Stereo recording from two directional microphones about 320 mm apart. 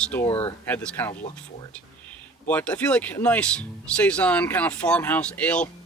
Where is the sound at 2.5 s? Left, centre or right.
Centre.